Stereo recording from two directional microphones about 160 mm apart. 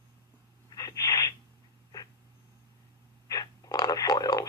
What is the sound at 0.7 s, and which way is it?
Sneeze, 20° left (ahead or behind).